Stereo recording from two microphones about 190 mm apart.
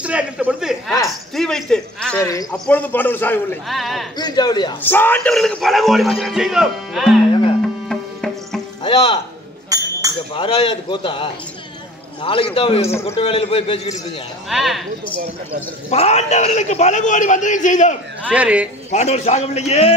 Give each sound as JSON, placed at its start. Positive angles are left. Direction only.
{"t": 0.0, "sound": "a sound", "side_deg": -5}
{"t": 1.3, "sound": "speech", "side_deg": 5}
{"t": 2.2, "sound": "a man's voice", "side_deg": 20}
{"t": 4.2, "sound": "a man's voice", "side_deg": 20}
{"t": 4.8, "sound": "speech", "side_deg": 10}
{"t": 7.9, "sound": "music", "side_deg": 0}
{"t": 8.8, "sound": "speech", "side_deg": 30}
{"t": 9.7, "sound": "a sound", "side_deg": -20}
{"t": 10.3, "sound": "a man's voice", "side_deg": 25}
{"t": 14.5, "sound": "speech", "side_deg": 0}
{"t": 15.9, "sound": "a man's voice", "side_deg": 35}
{"t": 18.3, "sound": "speech", "side_deg": -5}
{"t": 18.9, "sound": "a man's voice", "side_deg": 35}